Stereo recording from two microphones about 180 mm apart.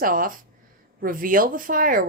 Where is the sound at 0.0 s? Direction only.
50° right (ahead or behind).